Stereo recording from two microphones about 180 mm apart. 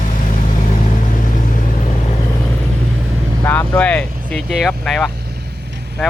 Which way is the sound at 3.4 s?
10° left (ahead or behind).